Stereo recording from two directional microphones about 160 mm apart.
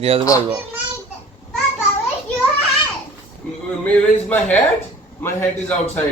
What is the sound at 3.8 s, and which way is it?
A man's voice, 10° left (ahead or behind).